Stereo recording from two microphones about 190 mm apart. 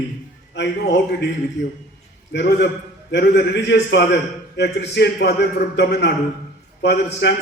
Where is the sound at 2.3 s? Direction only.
65° left (ahead or behind).